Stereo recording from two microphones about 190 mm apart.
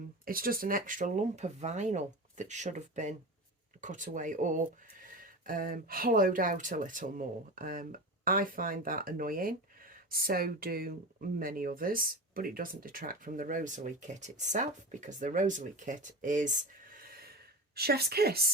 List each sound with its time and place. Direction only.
0.3 s a woman's voice: 50° right (ahead or behind)